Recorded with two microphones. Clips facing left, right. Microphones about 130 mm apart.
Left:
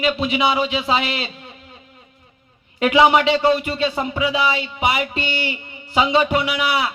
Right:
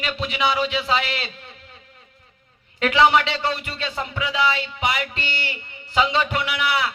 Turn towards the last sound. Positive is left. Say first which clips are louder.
# left 3 dB
turn(degrees=15)  # may be behind; listen again after turning